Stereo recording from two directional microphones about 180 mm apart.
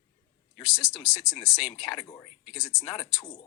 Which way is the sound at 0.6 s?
5° right (ahead or behind).